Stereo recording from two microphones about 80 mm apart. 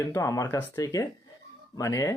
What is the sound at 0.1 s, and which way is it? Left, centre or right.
Speech, left.